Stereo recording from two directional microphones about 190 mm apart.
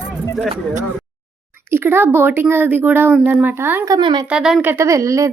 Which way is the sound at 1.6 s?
10° right (ahead or behind).